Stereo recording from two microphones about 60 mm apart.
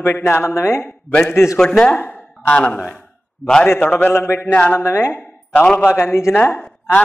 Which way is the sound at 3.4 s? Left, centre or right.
Centre.